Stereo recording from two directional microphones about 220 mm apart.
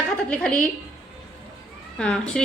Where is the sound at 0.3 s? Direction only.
5° left (ahead or behind).